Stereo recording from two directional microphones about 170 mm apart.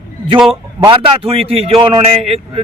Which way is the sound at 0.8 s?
30° right (ahead or behind).